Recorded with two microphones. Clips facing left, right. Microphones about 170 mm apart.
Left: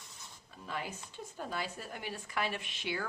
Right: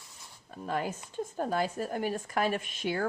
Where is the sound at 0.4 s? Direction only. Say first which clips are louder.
Right 8 dB; 45° right (ahead or behind).